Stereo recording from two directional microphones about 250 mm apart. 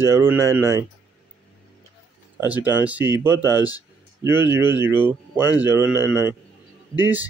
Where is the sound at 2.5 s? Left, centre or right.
Centre.